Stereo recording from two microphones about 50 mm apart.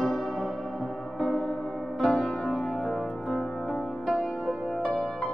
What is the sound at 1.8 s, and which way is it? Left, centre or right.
Music, centre.